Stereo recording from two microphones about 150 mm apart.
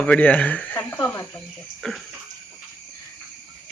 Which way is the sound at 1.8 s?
5° left (ahead or behind).